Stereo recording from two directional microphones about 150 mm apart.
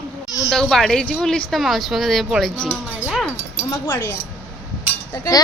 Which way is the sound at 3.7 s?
20° left (ahead or behind).